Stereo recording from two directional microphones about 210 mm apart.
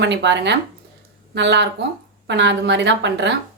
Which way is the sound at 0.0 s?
55° right (ahead or behind).